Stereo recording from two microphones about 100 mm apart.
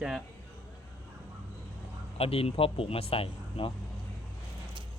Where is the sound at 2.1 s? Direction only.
75° left (ahead or behind).